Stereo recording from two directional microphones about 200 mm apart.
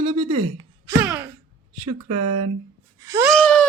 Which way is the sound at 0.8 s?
10° right (ahead or behind).